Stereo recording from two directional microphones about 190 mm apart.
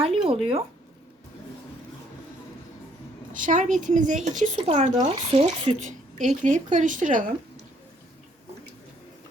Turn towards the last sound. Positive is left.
turn(degrees=-45)  # may be behind; listen again after turning